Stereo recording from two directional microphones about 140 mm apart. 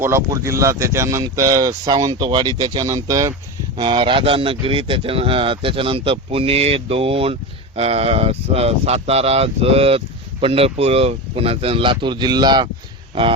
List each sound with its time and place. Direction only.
0.0 s speech: 20° right (ahead or behind)
3.8 s speech: 35° right (ahead or behind)